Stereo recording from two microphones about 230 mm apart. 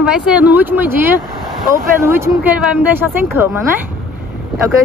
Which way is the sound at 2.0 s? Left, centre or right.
Centre.